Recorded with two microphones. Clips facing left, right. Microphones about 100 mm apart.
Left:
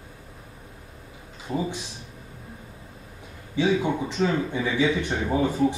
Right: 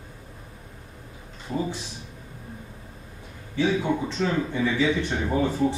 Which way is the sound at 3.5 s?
15° left (ahead or behind).